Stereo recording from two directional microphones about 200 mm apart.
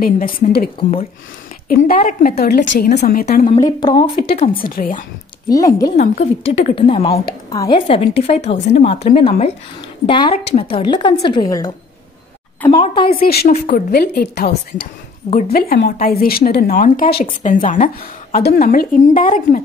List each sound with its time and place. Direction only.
0.0 s speech: 45° left (ahead or behind)
2.0 s speech: 40° left (ahead or behind); by 3.0 s 60° left (ahead or behind)
3.0 s speech: 40° left (ahead or behind)
3.4 s speech: 20° left (ahead or behind)
4.5 s speech: 45° left (ahead or behind)
5.5 s speech: 15° left (ahead or behind)
5.9 s a woman's voice: 35° left (ahead or behind)
13.1 s speech: 50° left (ahead or behind)